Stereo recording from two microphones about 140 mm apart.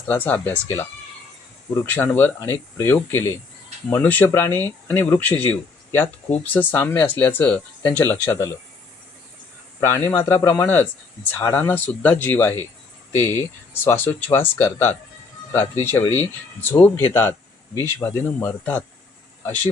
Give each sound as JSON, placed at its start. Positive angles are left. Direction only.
{"t": 0.1, "sound": "speech", "side_deg": 15}
{"t": 9.8, "sound": "speech", "side_deg": 20}